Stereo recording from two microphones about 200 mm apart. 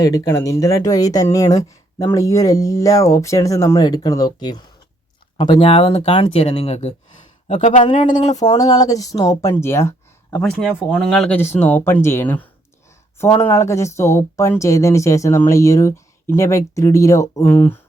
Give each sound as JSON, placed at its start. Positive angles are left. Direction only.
{"t": 0.0, "sound": "speech", "side_deg": 15}
{"t": 8.4, "sound": "speech", "side_deg": 20}
{"t": 10.4, "sound": "speech", "side_deg": -5}